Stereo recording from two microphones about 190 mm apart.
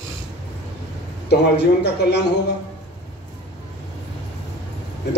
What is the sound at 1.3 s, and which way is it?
A man's voice, 60° left (ahead or behind).